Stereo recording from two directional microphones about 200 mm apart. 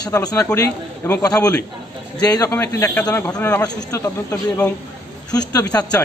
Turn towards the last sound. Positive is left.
turn(degrees=20)  # may be behind; listen again after turning